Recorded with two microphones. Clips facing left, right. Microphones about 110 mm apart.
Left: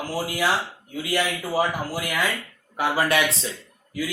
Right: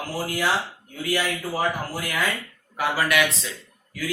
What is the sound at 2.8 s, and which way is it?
Speech, 25° left (ahead or behind).